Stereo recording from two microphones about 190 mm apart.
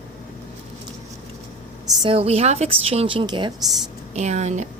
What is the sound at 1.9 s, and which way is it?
A woman's voice, 25° right (ahead or behind).